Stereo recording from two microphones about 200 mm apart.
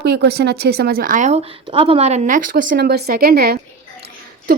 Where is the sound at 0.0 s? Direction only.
55° right (ahead or behind).